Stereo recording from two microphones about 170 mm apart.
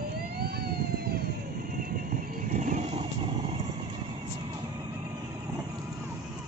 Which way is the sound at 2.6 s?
40° right (ahead or behind).